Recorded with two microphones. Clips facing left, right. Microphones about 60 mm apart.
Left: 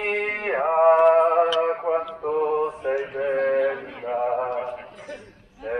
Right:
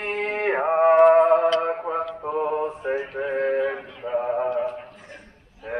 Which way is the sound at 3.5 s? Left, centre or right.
Left.